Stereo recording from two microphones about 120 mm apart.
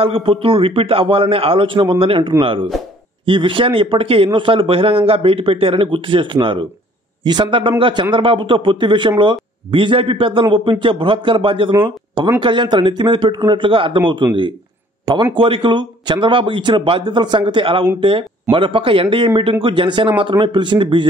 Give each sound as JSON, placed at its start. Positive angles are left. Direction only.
{"t": 0.0, "sound": "a man's voice", "side_deg": -50}